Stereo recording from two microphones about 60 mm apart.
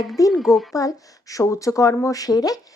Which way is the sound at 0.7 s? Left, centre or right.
Left.